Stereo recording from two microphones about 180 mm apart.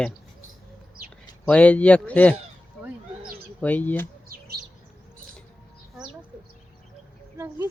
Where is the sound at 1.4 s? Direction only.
5° left (ahead or behind).